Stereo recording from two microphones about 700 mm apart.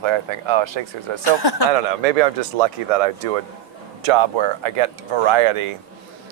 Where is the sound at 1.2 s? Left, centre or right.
Left.